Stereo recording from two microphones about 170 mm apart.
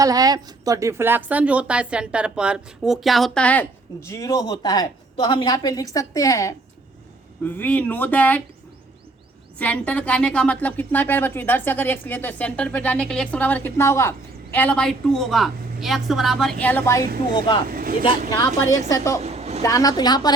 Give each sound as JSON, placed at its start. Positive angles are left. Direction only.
{"t": 0.0, "sound": "a woman's voice", "side_deg": -20}
{"t": 9.6, "sound": "a woman's voice", "side_deg": 10}
{"t": 17.3, "sound": "a woman's voice", "side_deg": 25}
{"t": 17.7, "sound": "speech", "side_deg": -55}
{"t": 18.9, "sound": "a woman's voice", "side_deg": 20}
{"t": 19.2, "sound": "a sound", "side_deg": -40}
{"t": 19.6, "sound": "a woman's voice", "side_deg": 20}